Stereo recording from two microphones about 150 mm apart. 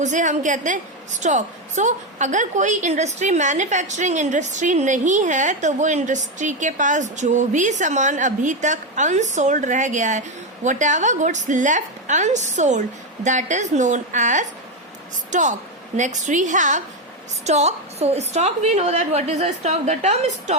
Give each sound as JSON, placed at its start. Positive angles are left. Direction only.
{"t": 0.0, "sound": "a woman's voice", "side_deg": -55}